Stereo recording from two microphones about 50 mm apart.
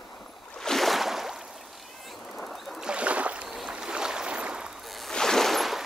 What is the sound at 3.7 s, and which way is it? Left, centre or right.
Boat, centre.